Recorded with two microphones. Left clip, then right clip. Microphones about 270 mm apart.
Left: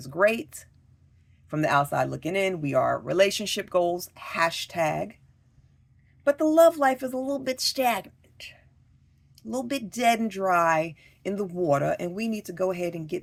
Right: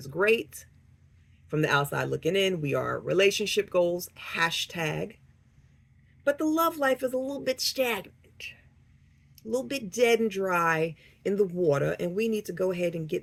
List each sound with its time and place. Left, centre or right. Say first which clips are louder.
0.0 s speech: left 2 dB; left
6.2 s speech: left 7 dB; left
9.9 s speech: right 1 dB; left